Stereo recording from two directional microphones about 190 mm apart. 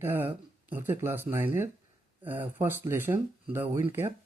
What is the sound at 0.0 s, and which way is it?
Speech, 10° right (ahead or behind).